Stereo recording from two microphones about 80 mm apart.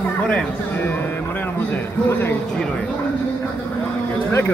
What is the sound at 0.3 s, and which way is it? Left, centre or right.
Speech, centre.